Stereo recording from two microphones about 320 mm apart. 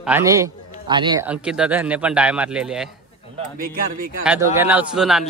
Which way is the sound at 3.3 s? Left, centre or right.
Right.